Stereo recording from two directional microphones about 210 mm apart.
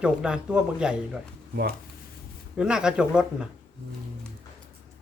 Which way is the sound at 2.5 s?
5° right (ahead or behind).